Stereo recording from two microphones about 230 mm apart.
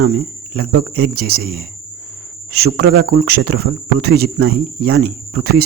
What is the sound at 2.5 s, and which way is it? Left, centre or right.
Speech, right.